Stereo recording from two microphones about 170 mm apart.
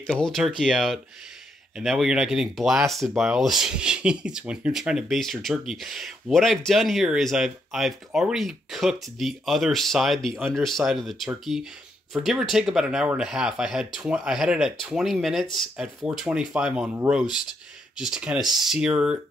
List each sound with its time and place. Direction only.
0.0 s speech: 5° left (ahead or behind)